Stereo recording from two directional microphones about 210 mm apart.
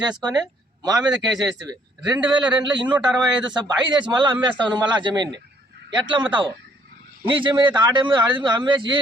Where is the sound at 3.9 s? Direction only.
20° right (ahead or behind).